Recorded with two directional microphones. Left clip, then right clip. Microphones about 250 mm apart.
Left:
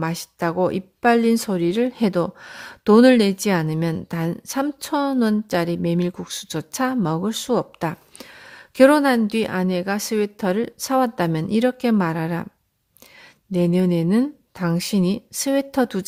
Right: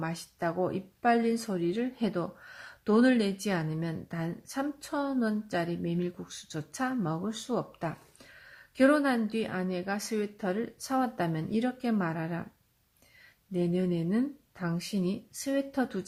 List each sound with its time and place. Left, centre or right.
0.0 s speech: left
13.5 s speech: left